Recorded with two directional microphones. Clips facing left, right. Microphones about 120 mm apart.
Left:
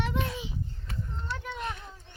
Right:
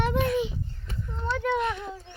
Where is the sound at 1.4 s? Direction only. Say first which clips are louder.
Right 13 dB; 90° right.